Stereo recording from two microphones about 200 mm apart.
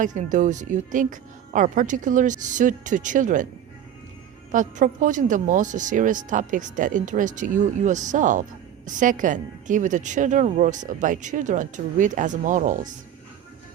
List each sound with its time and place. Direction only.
0.0 s speech: 40° right (ahead or behind)
4.5 s speech: 40° right (ahead or behind)